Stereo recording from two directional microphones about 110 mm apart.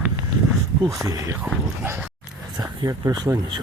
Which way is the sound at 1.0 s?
35° right (ahead or behind).